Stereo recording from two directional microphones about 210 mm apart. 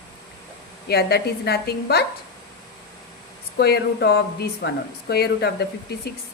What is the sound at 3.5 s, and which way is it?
A woman's voice, 50° left (ahead or behind).